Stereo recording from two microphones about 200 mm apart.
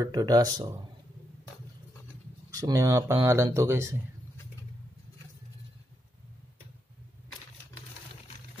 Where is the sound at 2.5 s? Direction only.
15° right (ahead or behind).